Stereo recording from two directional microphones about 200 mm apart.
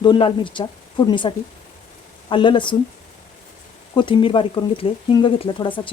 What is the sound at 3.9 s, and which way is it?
Speech, 25° left (ahead or behind).